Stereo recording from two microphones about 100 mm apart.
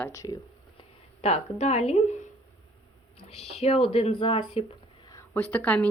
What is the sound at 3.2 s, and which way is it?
Speech, 90° left.